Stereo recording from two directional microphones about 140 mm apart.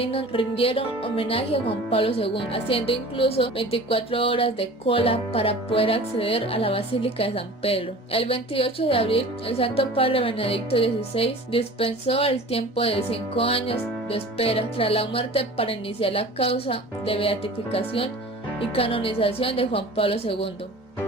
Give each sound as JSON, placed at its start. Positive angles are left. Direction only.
{"t": 0.0, "sound": "speech", "side_deg": 40}